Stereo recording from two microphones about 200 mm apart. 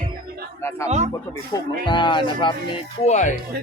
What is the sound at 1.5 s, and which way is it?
Speech, 25° left (ahead or behind).